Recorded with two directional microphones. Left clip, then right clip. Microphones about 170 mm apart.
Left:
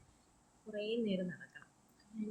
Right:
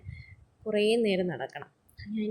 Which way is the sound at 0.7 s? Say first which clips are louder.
Right 13 dB; 40° right (ahead or behind).